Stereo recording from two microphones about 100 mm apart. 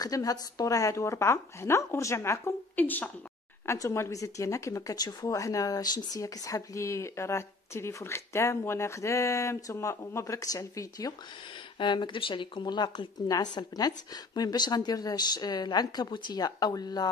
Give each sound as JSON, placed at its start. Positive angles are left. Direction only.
{"t": 0.0, "sound": "a woman's voice", "side_deg": 35}
{"t": 2.7, "sound": "speech", "side_deg": 15}
{"t": 3.6, "sound": "speech", "side_deg": 30}
{"t": 11.8, "sound": "speech", "side_deg": 50}